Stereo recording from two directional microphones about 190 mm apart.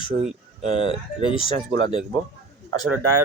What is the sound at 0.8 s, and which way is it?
Speech, 25° left (ahead or behind).